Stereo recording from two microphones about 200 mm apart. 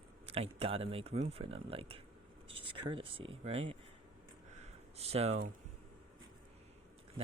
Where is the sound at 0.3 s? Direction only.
30° right (ahead or behind).